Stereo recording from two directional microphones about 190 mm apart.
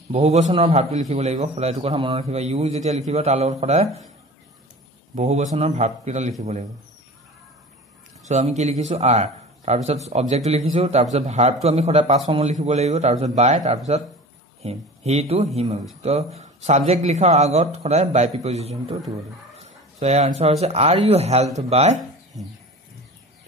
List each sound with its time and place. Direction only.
0.1 s a man's voice: 35° right (ahead or behind)
5.1 s a man's voice: 40° right (ahead or behind)
8.3 s a man's voice: 35° right (ahead or behind)